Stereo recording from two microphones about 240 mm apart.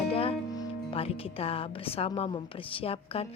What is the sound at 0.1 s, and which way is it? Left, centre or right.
Speech, left.